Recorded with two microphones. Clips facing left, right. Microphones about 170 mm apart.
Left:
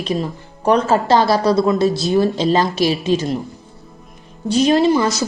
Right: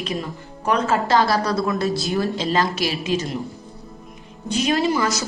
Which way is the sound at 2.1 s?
25° left (ahead or behind).